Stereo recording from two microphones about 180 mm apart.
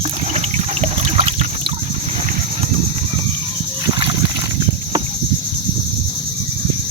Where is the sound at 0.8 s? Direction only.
30° right (ahead or behind).